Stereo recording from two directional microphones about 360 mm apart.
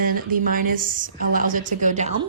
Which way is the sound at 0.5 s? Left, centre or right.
Right.